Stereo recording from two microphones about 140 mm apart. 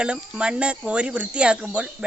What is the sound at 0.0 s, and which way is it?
Speech, 5° right (ahead or behind).